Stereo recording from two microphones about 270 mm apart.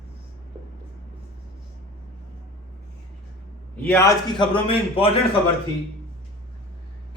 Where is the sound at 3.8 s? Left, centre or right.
Centre.